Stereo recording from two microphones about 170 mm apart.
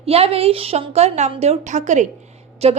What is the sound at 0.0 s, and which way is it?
A woman's voice, 35° right (ahead or behind).